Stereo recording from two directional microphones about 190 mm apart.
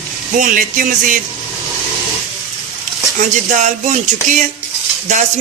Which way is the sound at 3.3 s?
40° right (ahead or behind).